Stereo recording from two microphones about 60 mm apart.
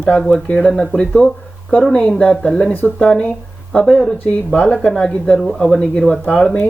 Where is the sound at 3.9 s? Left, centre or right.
Centre.